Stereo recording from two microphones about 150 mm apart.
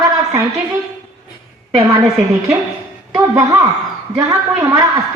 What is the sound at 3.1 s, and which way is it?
A woman's voice, 20° right (ahead or behind).